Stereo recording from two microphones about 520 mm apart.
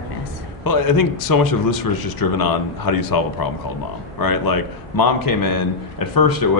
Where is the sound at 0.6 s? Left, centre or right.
Left.